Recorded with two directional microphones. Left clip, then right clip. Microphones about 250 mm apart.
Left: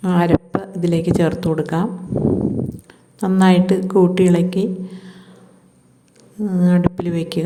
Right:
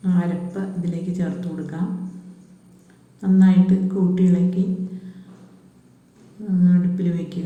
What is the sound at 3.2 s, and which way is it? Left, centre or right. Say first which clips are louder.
A woman's voice: left 4 dB; left.